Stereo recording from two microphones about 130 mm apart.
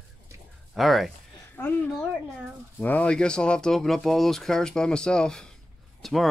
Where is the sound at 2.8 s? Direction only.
10° left (ahead or behind).